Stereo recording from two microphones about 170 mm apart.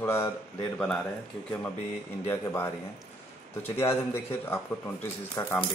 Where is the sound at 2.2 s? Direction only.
15° left (ahead or behind).